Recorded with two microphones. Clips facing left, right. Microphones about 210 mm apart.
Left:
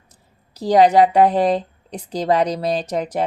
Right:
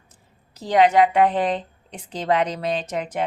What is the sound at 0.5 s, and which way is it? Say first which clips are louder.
Speech: left 4 dB; 35° left (ahead or behind).